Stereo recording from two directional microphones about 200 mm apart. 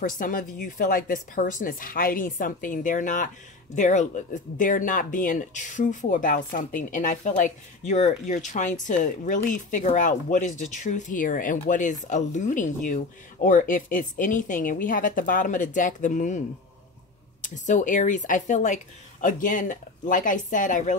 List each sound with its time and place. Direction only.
0.0 s speech: 45° left (ahead or behind)
17.4 s speech: 40° left (ahead or behind)